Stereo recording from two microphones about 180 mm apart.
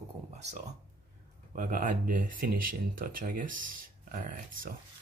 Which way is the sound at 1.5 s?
50° right (ahead or behind).